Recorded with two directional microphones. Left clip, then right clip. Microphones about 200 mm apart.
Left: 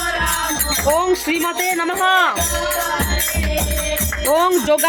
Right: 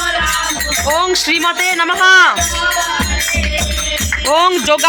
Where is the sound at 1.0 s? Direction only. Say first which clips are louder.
Right 5 dB; 10° left (ahead or behind).